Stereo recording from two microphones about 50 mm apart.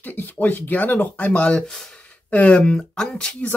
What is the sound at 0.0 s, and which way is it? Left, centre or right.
Speech, left.